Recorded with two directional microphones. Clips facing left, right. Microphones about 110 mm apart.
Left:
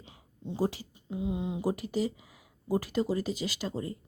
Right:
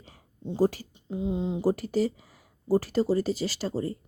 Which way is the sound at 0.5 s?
45° right (ahead or behind).